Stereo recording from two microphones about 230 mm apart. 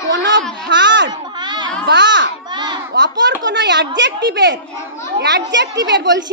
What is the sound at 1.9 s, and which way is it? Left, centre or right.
Children playing, right.